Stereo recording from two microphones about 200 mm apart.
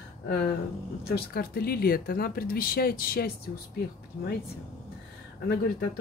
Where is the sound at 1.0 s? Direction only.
50° left (ahead or behind).